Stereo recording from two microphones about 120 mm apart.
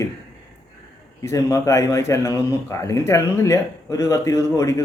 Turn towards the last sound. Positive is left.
turn(degrees=25)  # may be behind; listen again after turning